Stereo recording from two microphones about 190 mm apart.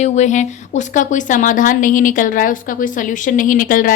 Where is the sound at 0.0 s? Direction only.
40° left (ahead or behind).